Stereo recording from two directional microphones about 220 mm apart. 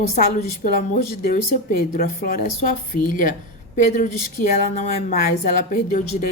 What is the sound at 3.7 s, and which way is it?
Speech, 35° left (ahead or behind).